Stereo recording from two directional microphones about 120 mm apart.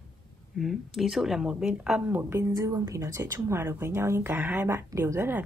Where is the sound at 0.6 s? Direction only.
Centre (ahead or behind).